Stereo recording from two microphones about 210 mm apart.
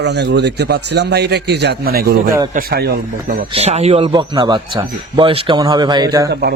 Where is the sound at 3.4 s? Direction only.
30° right (ahead or behind).